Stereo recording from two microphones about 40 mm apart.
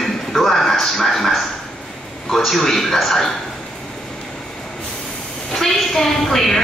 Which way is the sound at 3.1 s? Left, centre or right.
Centre.